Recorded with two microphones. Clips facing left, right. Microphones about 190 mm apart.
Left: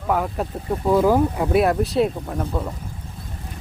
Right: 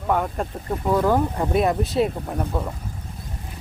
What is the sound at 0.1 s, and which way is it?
Speech, 5° left (ahead or behind).